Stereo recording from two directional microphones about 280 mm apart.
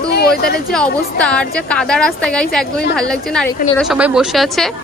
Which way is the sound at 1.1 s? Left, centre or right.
Centre.